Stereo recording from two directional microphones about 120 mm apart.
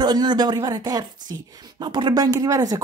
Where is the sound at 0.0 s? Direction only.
35° right (ahead or behind).